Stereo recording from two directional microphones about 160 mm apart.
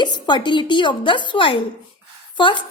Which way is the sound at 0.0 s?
30° left (ahead or behind).